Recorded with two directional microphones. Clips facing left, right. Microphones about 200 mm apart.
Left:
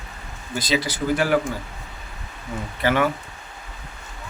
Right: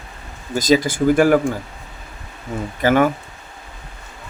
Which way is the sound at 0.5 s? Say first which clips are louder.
Right 8 dB; 45° right (ahead or behind).